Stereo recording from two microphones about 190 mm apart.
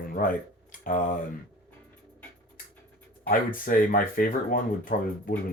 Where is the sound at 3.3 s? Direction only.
50° left (ahead or behind).